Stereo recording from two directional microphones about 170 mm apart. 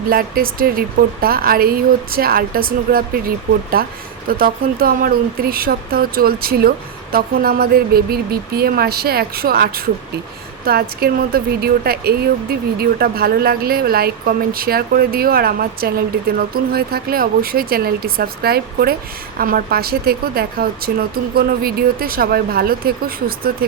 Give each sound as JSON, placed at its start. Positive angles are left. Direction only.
{"t": 0.1, "sound": "speech", "side_deg": -60}